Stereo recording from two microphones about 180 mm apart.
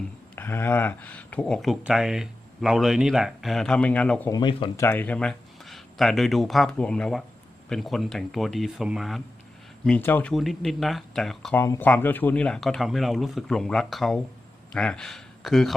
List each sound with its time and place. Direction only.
0.3 s speech: 15° left (ahead or behind)
4.3 s speech: 25° left (ahead or behind)
4.8 s speech: 10° left (ahead or behind)
11.5 s speech: 15° left (ahead or behind)